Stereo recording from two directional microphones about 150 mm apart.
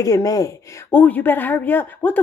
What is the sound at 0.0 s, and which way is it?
Speech, 25° left (ahead or behind).